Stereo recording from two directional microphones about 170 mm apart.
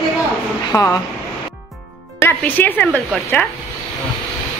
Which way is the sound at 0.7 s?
20° left (ahead or behind).